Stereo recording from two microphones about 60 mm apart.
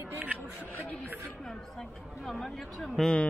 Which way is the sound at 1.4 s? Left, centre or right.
Centre.